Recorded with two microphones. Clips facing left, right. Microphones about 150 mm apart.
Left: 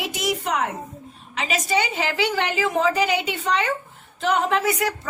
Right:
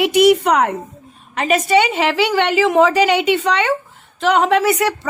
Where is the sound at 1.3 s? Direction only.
55° right (ahead or behind).